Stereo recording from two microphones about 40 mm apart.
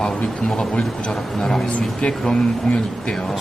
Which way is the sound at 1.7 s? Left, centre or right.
Left.